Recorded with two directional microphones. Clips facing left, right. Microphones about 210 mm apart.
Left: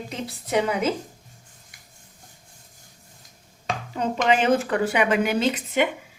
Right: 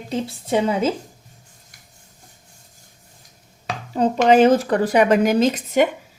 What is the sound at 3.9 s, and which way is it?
Speech, 40° right (ahead or behind).